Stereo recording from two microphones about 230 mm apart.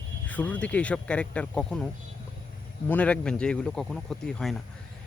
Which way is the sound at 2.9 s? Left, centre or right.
Centre.